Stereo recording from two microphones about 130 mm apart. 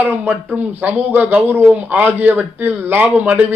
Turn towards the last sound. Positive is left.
turn(degrees=-10)  # may be behind; listen again after turning